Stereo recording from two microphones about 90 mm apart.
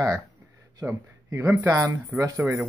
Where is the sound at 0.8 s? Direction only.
20° right (ahead or behind).